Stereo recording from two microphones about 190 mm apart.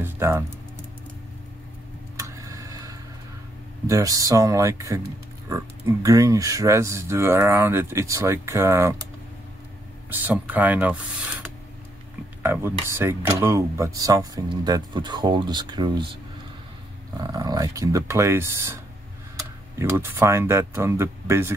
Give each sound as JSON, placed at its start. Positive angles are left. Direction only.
{"t": 0.0, "sound": "music", "side_deg": -15}
{"t": 2.1, "sound": "tick-tock", "side_deg": -15}
{"t": 3.8, "sound": "speech", "side_deg": -15}
{"t": 10.0, "sound": "speech", "side_deg": -10}
{"t": 12.4, "sound": "speech", "side_deg": -10}
{"t": 17.2, "sound": "speech", "side_deg": -20}
{"t": 19.8, "sound": "speech", "side_deg": -15}